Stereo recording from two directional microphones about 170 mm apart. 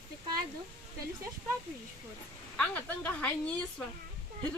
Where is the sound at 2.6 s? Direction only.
10° left (ahead or behind).